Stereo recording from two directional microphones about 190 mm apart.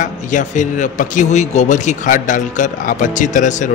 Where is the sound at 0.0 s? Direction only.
40° left (ahead or behind).